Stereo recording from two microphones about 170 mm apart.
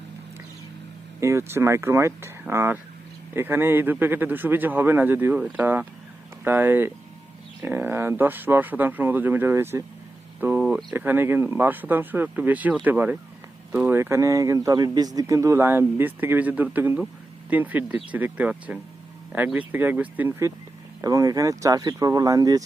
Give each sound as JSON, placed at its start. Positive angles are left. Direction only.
{"t": 1.2, "sound": "speech", "side_deg": -15}
{"t": 10.4, "sound": "a sound", "side_deg": -10}
{"t": 10.9, "sound": "speech", "side_deg": -10}